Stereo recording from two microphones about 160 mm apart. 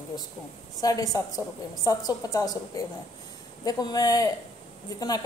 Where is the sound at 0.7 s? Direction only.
20° left (ahead or behind).